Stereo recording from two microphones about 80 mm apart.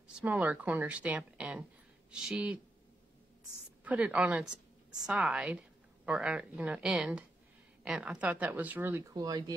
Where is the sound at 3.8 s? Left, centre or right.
Centre.